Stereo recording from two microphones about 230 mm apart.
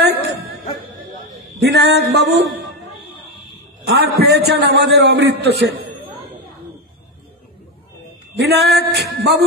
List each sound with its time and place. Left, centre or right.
0.0 s music: right
1.6 s music: right
2.1 s a man's voice: right
3.8 s a man's voice: right
8.4 s a man's voice: right